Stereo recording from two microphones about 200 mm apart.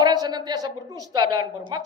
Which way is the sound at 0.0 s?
20° right (ahead or behind).